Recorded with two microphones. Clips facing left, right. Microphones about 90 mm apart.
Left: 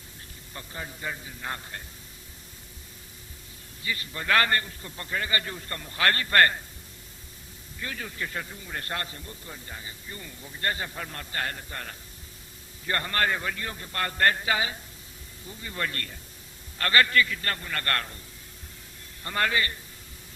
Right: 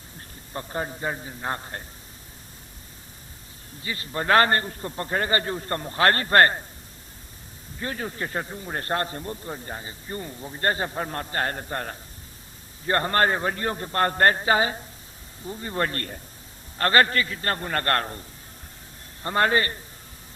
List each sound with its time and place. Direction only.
0.5 s speech: 40° right (ahead or behind)
3.8 s speech: 30° right (ahead or behind)
7.8 s speech: 35° right (ahead or behind)
19.2 s speech: 30° right (ahead or behind)